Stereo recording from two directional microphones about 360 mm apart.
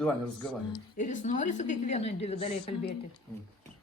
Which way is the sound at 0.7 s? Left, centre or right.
Centre.